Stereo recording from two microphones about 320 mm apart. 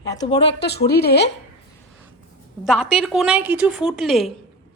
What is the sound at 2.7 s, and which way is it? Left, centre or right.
A woman's voice, centre.